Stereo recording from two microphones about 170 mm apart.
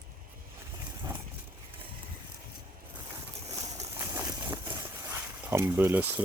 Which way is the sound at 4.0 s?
15° right (ahead or behind).